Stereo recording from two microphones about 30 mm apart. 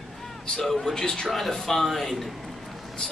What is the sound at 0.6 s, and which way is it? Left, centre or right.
Speech, centre.